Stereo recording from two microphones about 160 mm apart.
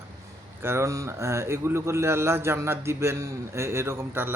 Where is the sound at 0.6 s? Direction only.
15° right (ahead or behind).